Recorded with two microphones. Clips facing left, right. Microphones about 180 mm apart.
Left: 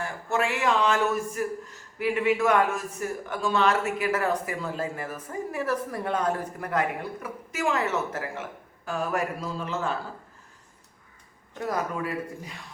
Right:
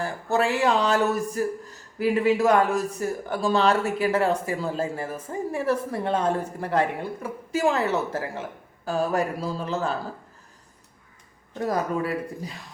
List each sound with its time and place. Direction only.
0.0 s speech: 35° right (ahead or behind)
12.0 s speech: 35° right (ahead or behind)